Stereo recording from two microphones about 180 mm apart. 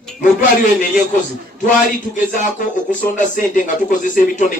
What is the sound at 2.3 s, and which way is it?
A man's voice, 45° left (ahead or behind).